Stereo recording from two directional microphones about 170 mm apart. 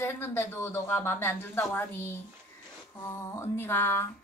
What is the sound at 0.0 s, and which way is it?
Speech, 15° left (ahead or behind).